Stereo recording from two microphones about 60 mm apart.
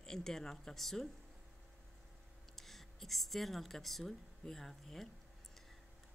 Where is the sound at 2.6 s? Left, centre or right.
Centre.